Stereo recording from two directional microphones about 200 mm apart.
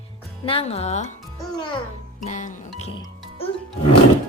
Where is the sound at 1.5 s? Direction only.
20° left (ahead or behind).